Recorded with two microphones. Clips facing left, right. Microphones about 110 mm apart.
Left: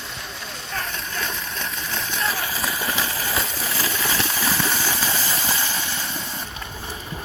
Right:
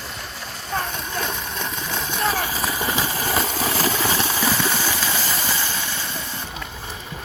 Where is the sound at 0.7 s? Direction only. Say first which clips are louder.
Right 4 dB; 30° right (ahead or behind).